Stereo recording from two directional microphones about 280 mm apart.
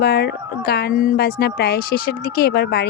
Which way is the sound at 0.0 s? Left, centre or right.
Left.